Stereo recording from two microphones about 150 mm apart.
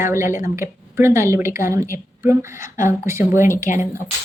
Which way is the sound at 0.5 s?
20° right (ahead or behind).